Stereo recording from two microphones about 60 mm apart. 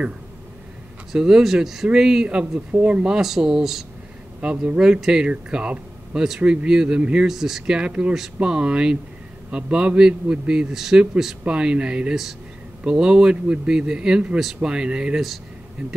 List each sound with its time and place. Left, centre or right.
1.1 s speech: centre
7.2 s speech: centre
11.4 s speech: centre